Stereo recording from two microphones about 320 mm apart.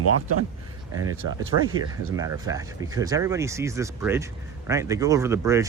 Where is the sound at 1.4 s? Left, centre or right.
Right.